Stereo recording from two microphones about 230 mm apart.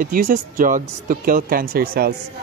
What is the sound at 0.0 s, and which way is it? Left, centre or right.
Speech, right.